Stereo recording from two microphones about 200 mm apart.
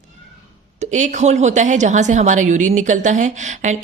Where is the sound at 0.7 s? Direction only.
35° right (ahead or behind).